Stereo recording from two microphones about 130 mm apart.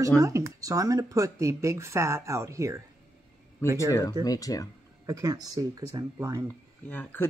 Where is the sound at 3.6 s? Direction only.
20° left (ahead or behind).